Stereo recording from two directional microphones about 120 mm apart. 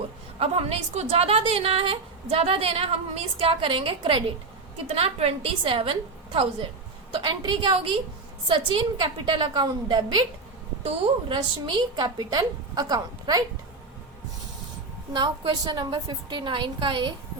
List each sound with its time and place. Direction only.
0.3 s a woman's voice: 55° right (ahead or behind)
4.9 s a woman's voice: 55° right (ahead or behind)
7.1 s a woman's voice: 40° right (ahead or behind)
11.3 s a woman's voice: 40° right (ahead or behind)
15.1 s a woman's voice: 40° right (ahead or behind)